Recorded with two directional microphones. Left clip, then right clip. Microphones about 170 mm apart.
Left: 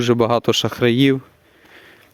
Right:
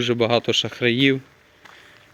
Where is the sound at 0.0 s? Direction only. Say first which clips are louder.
Left 3 dB; 55° left (ahead or behind).